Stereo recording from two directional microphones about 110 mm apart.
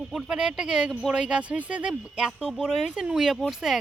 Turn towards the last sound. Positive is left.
turn(degrees=-5)  # may be behind; listen again after turning